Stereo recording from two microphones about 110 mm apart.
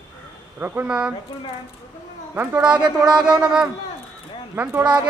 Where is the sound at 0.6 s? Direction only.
15° right (ahead or behind).